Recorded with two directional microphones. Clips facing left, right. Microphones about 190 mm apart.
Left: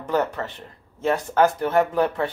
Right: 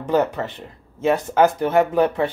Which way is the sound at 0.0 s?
20° right (ahead or behind).